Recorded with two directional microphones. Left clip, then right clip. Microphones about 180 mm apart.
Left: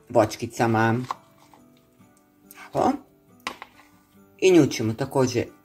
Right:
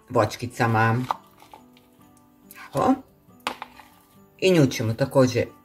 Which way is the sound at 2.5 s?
30° left (ahead or behind).